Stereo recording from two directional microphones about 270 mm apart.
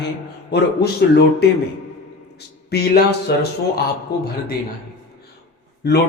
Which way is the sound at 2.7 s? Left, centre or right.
Left.